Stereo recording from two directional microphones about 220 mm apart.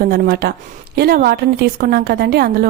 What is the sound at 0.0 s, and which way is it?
Speech, 45° right (ahead or behind).